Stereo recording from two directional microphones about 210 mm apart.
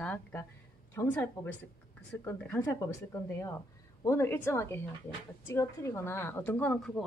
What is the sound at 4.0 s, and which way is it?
A woman's voice, 10° left (ahead or behind).